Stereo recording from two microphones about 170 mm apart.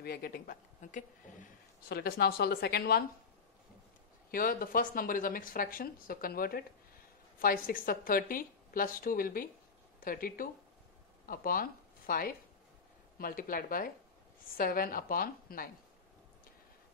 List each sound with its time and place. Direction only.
0.0 s speech: 65° left (ahead or behind)
4.3 s speech: 55° left (ahead or behind)